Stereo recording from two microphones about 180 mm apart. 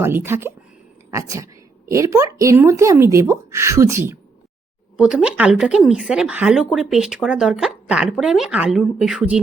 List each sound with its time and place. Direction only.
0.0 s speech: 15° right (ahead or behind)